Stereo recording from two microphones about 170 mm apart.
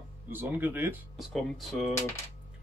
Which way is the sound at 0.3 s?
10° right (ahead or behind).